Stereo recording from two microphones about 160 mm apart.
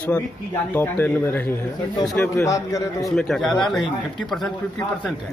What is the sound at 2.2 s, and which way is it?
Speech, 20° left (ahead or behind).